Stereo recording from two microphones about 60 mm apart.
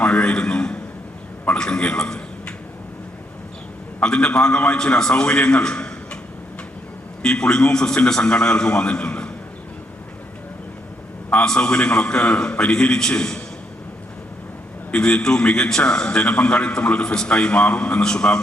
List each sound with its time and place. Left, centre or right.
0.0 s a sound: centre
1.5 s a man's voice: centre
4.0 s a man's voice: centre
7.2 s a man's voice: centre
11.3 s a man's voice: centre
14.9 s a man's voice: centre